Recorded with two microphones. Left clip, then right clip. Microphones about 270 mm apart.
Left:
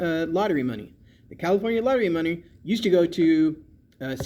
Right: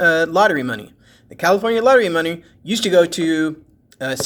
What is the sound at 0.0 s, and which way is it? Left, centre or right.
Speech, right.